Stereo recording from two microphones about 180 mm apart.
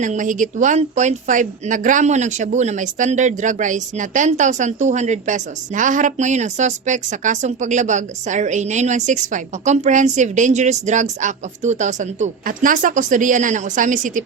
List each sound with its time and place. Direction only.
0.0 s speech: 45° right (ahead or behind)